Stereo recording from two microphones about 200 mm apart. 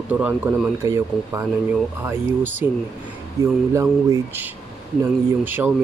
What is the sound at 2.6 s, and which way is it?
Speech, 25° left (ahead or behind).